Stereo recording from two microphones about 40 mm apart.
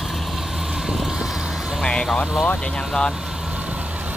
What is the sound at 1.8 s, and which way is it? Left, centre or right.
Speech, left.